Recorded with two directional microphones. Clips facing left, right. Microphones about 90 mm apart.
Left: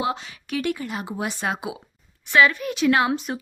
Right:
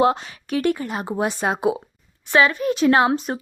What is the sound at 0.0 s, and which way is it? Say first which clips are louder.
Speech: right 8 dB; 45° right (ahead or behind).